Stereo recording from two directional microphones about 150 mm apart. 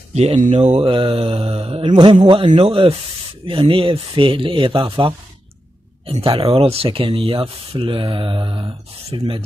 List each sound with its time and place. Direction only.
0.1 s speech: 45° right (ahead or behind)
0.8 s speech: 35° right (ahead or behind)
6.2 s speech: 35° right (ahead or behind)